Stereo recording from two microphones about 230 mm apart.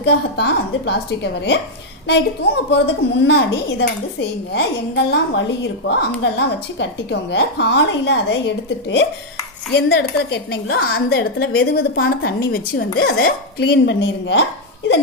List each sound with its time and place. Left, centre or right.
0.0 s a woman's voice: left
2.6 s a woman's voice: left